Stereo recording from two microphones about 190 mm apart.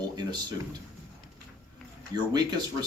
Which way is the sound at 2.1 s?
20° right (ahead or behind).